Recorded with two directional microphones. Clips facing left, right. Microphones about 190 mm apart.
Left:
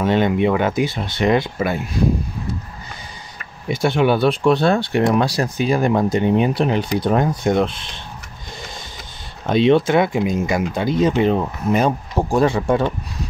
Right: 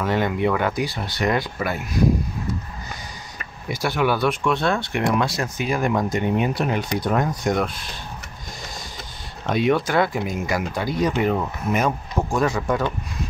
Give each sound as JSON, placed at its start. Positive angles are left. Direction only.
{"t": 0.0, "sound": "speech", "side_deg": 20}
{"t": 3.7, "sound": "speech", "side_deg": 25}
{"t": 9.5, "sound": "speech", "side_deg": 25}